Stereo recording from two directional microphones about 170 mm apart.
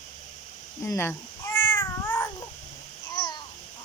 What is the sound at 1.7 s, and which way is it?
Cat, 15° left (ahead or behind).